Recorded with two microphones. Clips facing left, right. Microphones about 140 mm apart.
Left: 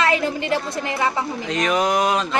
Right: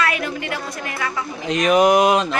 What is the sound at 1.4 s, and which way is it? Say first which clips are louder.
Speech: right 6 dB; 15° right (ahead or behind).